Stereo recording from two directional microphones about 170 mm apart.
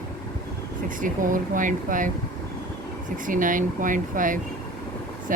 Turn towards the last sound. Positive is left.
turn(degrees=-50)  # may be behind; listen again after turning